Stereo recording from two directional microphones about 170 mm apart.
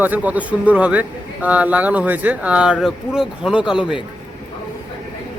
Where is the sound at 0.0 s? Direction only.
10° right (ahead or behind).